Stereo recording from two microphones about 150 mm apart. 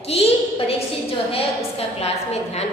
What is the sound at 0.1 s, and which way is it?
Speech, 45° left (ahead or behind).